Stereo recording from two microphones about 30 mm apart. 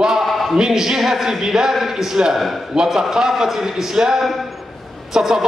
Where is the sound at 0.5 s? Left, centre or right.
Centre.